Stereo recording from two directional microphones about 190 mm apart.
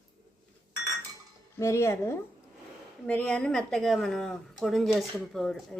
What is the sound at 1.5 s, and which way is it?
Speech, 15° left (ahead or behind).